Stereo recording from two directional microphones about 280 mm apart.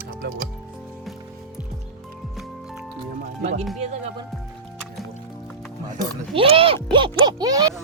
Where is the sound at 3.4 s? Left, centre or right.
Right.